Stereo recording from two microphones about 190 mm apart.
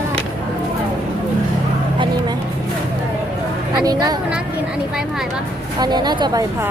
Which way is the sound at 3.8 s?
20° right (ahead or behind).